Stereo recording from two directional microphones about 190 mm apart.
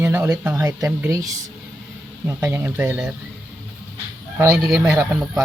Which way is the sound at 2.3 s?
15° right (ahead or behind).